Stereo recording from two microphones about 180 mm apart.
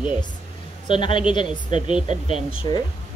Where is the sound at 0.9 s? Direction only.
30° left (ahead or behind).